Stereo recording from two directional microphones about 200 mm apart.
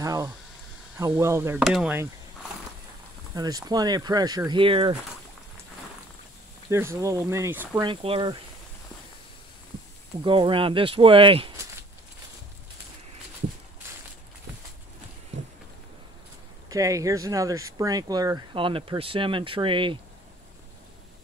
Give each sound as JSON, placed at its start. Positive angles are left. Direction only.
{"t": 0.0, "sound": "a sound", "side_deg": -15}
{"t": 0.9, "sound": "speech", "side_deg": -10}
{"t": 3.3, "sound": "speech", "side_deg": -20}
{"t": 6.7, "sound": "speech", "side_deg": -15}
{"t": 7.8, "sound": "speech", "side_deg": -25}
{"t": 10.2, "sound": "speech", "side_deg": -25}
{"t": 15.3, "sound": "a sound", "side_deg": -65}
{"t": 16.6, "sound": "speech", "side_deg": -15}